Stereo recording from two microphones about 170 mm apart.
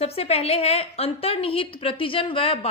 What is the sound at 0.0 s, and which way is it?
A woman's voice, 35° left (ahead or behind).